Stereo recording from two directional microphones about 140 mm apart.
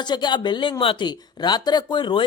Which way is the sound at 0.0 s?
30° left (ahead or behind).